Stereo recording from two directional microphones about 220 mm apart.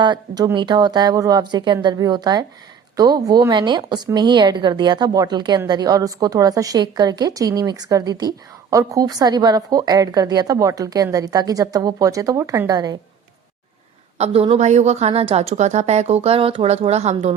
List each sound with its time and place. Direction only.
0.0 s a woman's voice: 20° right (ahead or behind)
14.2 s a woman's voice: 25° right (ahead or behind)